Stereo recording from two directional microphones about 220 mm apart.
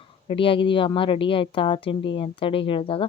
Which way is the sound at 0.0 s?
25° left (ahead or behind).